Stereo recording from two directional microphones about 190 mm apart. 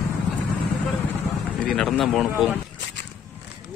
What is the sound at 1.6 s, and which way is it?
Speech, centre (ahead or behind).